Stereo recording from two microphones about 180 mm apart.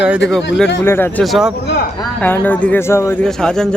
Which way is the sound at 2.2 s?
10° left (ahead or behind).